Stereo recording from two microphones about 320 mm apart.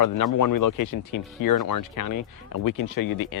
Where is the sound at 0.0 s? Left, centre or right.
Left.